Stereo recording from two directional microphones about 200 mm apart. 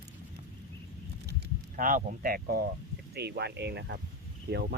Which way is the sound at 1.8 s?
40° right (ahead or behind).